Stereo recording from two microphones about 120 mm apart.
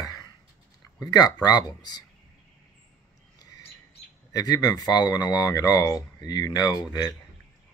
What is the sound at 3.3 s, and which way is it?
Squawk, 30° left (ahead or behind).